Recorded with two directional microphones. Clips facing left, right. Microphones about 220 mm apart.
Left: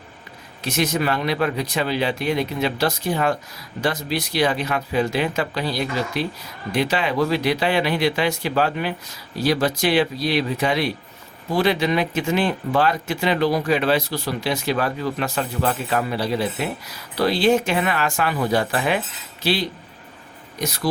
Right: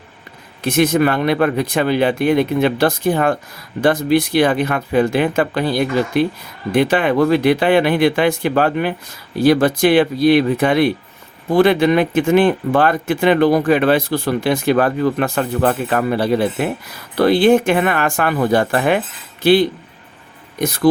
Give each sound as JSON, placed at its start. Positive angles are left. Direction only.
{"t": 0.6, "sound": "speech", "side_deg": -55}